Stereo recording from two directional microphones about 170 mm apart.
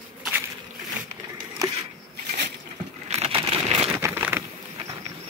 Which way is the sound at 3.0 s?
40° right (ahead or behind).